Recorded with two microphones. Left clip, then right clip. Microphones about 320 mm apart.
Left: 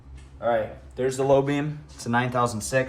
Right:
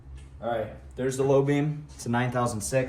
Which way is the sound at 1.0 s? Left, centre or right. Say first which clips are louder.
Left 3 dB; centre.